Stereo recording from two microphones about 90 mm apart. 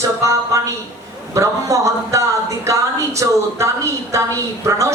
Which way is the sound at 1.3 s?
35° right (ahead or behind).